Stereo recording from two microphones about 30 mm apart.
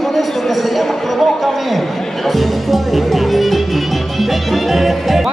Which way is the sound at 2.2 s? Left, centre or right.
Centre.